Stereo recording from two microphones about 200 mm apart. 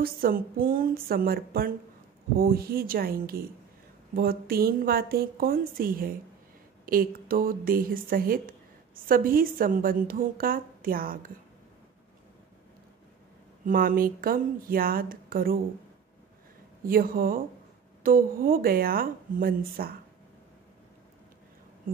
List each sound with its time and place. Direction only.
0.0 s a woman's voice: 45° right (ahead or behind)
13.7 s a woman's voice: 45° right (ahead or behind)
16.8 s a woman's voice: 45° right (ahead or behind)